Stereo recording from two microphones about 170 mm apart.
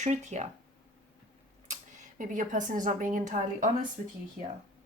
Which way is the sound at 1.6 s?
50° right (ahead or behind).